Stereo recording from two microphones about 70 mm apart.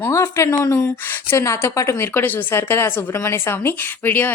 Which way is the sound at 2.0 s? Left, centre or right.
Left.